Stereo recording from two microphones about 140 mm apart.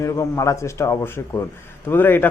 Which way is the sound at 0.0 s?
20° left (ahead or behind).